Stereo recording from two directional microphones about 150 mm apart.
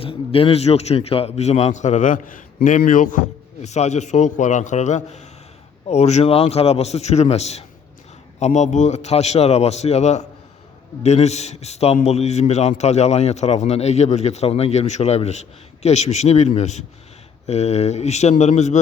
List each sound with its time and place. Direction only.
0.0 s a man's voice: 40° left (ahead or behind)